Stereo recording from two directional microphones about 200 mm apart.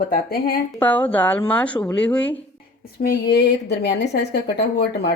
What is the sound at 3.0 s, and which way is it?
Speech, 50° left (ahead or behind).